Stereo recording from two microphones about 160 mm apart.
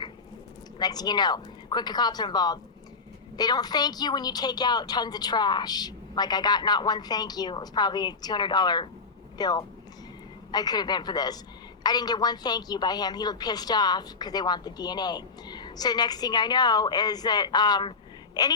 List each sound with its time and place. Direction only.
0.8 s a woman's voice: 25° left (ahead or behind)